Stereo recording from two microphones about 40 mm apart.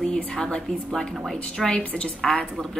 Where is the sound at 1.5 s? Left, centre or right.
Centre.